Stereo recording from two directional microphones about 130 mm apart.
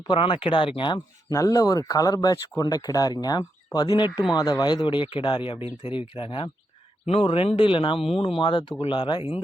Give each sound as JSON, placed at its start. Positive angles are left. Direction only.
{"t": 0.1, "sound": "speech", "side_deg": 40}
{"t": 1.3, "sound": "speech", "side_deg": 25}